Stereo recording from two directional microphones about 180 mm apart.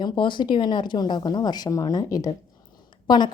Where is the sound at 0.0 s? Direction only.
25° left (ahead or behind).